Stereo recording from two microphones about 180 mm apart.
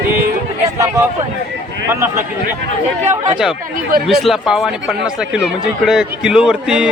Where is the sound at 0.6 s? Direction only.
15° right (ahead or behind).